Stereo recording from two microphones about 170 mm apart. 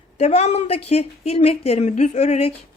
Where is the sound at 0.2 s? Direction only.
40° left (ahead or behind).